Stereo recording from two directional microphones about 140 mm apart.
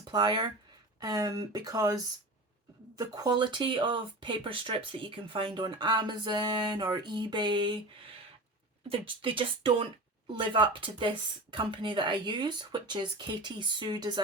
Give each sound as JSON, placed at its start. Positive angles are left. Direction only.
{"t": 0.0, "sound": "speech", "side_deg": -30}
{"t": 3.0, "sound": "speech", "side_deg": -30}
{"t": 8.9, "sound": "speech", "side_deg": -40}